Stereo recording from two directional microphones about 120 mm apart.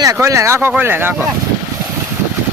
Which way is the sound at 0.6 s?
15° right (ahead or behind).